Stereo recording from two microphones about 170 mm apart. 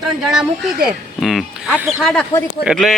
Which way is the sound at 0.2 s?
Centre (ahead or behind).